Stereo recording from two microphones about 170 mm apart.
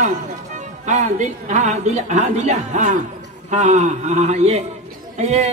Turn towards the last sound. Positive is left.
turn(degrees=-40)  # may be behind; listen again after turning